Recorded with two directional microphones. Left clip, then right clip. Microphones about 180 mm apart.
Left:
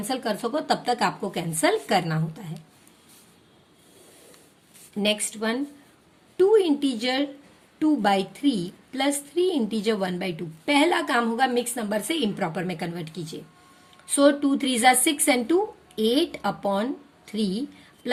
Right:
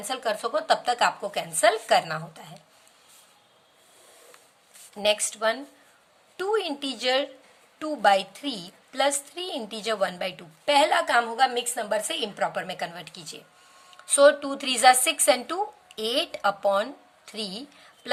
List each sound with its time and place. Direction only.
0.0 s a woman's voice: 15° right (ahead or behind)
5.0 s a woman's voice: 25° right (ahead or behind)